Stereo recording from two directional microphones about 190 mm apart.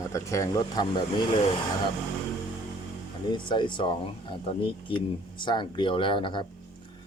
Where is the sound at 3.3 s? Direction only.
25° left (ahead or behind).